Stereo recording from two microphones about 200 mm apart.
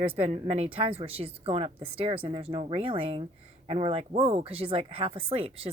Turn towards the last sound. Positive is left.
turn(degrees=-30)  # may be behind; listen again after turning